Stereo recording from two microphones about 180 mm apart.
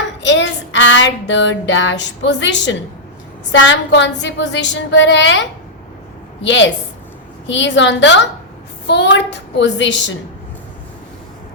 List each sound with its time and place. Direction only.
0.2 s music: 90° left
3.5 s a woman's voice: 90° left